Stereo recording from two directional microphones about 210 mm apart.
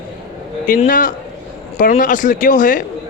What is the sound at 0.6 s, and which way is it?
Speech, 40° left (ahead or behind).